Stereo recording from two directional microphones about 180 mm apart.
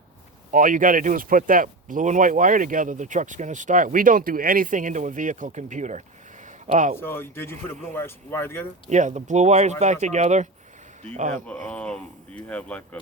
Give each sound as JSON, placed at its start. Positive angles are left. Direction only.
{"t": 0.5, "sound": "speech", "side_deg": -50}
{"t": 7.0, "sound": "speech", "side_deg": 15}
{"t": 8.9, "sound": "speech", "side_deg": -40}
{"t": 11.4, "sound": "speech", "side_deg": 5}